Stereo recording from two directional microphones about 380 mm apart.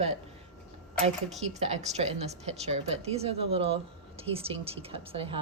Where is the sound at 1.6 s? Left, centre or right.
Centre.